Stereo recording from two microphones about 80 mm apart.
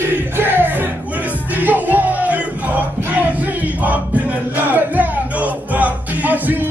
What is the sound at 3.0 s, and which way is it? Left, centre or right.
Battle cry, right.